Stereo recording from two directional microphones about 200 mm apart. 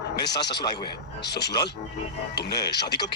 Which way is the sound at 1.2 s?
55° left (ahead or behind).